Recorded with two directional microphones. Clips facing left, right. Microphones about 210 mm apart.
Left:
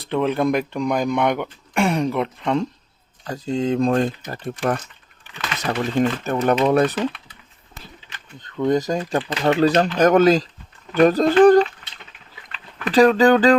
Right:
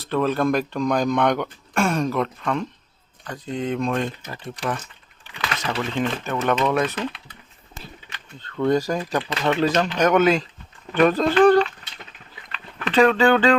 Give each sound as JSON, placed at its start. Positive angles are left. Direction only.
{"t": 0.0, "sound": "speech", "side_deg": 15}
{"t": 4.5, "sound": "speech", "side_deg": 50}
{"t": 6.0, "sound": "speech", "side_deg": 35}
{"t": 8.4, "sound": "speech", "side_deg": 15}
{"t": 12.9, "sound": "speech", "side_deg": 35}